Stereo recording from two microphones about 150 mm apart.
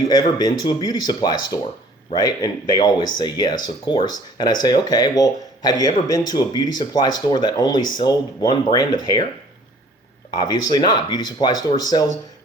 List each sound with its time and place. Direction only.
0.1 s speech: 25° left (ahead or behind)
10.3 s speech: 25° left (ahead or behind)